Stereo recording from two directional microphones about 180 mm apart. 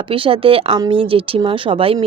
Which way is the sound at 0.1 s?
30° right (ahead or behind).